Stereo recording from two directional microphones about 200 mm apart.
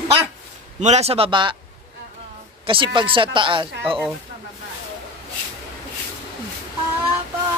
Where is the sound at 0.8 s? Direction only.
35° right (ahead or behind).